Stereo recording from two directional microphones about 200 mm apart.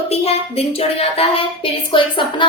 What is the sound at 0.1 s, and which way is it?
A woman's voice, 30° left (ahead or behind).